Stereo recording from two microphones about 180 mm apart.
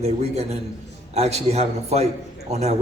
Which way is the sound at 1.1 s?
35° right (ahead or behind).